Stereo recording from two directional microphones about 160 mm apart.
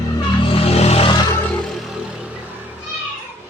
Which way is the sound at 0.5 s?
40° left (ahead or behind).